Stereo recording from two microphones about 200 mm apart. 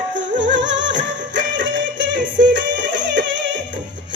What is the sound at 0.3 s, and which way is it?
Music, 65° right (ahead or behind).